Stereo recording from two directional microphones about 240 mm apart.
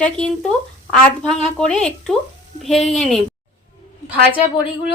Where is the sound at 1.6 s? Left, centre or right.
Centre.